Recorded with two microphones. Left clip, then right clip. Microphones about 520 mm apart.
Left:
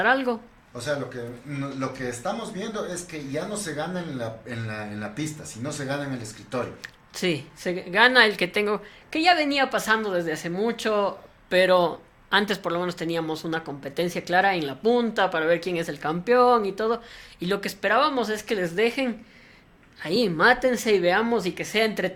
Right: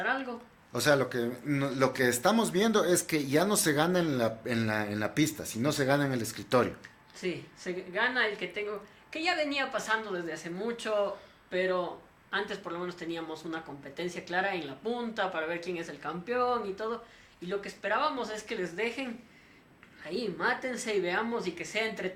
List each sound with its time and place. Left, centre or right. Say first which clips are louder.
0.0 s speech: left 10 dB; left
0.7 s speech: right 3 dB; right
6.8 s speech: left 9 dB; left
11.4 s speech: left 11 dB; left